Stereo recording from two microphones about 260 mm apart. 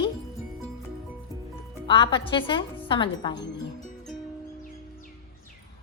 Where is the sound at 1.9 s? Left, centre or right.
Centre.